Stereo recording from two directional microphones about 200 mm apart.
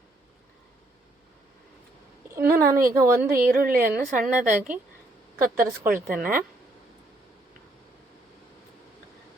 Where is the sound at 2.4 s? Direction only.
50° right (ahead or behind).